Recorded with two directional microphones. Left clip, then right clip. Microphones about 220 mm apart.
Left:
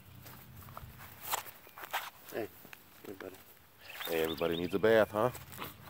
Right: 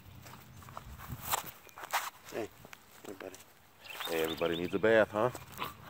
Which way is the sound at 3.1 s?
5° left (ahead or behind).